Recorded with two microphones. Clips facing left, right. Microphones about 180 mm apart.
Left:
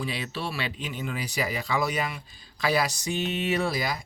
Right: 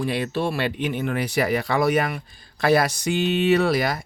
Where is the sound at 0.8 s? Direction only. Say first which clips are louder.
Right 9 dB; 65° right (ahead or behind).